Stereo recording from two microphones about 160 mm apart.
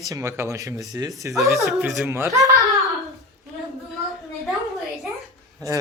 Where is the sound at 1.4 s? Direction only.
Centre (ahead or behind).